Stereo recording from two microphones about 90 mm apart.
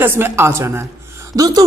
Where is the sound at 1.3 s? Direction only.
45° right (ahead or behind).